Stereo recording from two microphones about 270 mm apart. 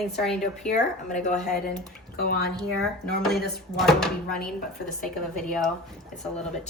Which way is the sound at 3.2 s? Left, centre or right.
Centre.